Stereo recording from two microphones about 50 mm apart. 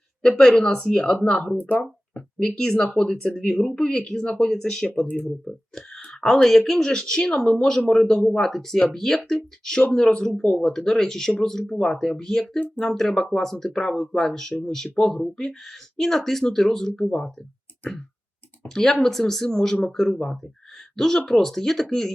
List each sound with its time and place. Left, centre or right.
0.2 s speech: centre
1.5 s speech: left
2.2 s a sound: left
2.6 s speech: centre
6.1 s speech: centre
17.0 s speech: centre
18.7 s speech: centre